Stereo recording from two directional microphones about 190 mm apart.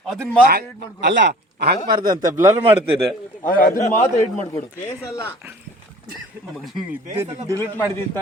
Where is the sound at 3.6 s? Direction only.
45° left (ahead or behind).